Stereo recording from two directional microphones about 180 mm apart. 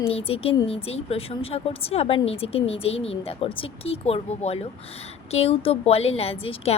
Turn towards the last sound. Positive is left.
turn(degrees=30)  # may be behind; listen again after turning